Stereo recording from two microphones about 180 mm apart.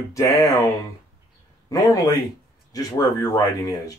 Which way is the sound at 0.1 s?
20° left (ahead or behind).